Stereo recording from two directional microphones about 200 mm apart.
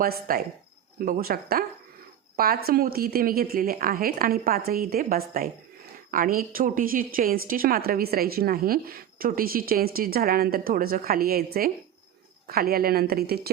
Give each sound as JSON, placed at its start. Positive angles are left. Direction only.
{"t": 0.0, "sound": "a woman's voice", "side_deg": -50}